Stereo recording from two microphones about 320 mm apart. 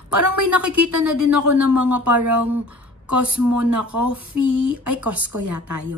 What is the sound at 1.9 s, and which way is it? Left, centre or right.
Speech, right.